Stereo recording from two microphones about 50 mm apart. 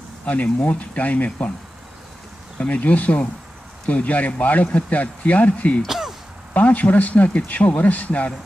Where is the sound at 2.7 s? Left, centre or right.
Left.